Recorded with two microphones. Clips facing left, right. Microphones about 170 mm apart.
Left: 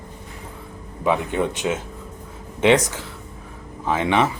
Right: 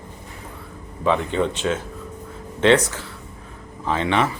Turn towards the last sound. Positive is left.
turn(degrees=15)  # may be behind; listen again after turning